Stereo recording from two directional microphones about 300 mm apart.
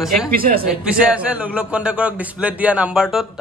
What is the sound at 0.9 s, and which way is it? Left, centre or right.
A man's voice, centre.